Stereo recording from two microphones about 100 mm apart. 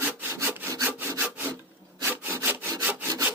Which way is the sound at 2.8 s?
20° right (ahead or behind).